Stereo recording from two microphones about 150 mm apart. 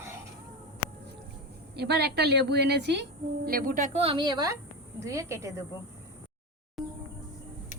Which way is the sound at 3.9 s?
40° right (ahead or behind).